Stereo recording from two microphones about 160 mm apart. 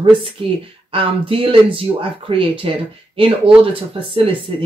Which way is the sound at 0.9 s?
35° right (ahead or behind).